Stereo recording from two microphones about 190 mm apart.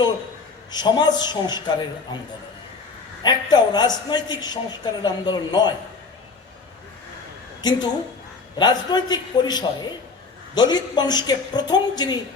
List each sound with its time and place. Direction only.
0.7 s a man's voice: 20° left (ahead or behind)
3.2 s a man's voice: 20° left (ahead or behind)
7.6 s a woman's voice: 20° left (ahead or behind)